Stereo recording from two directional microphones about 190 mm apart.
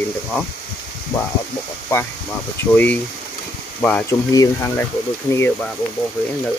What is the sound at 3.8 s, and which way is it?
Speech, 10° left (ahead or behind).